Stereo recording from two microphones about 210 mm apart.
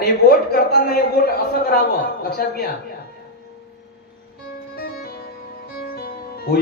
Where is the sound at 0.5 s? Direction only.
45° left (ahead or behind).